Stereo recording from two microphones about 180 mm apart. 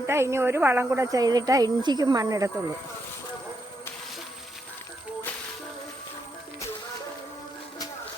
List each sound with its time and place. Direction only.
0.1 s a woman's voice: 15° right (ahead or behind)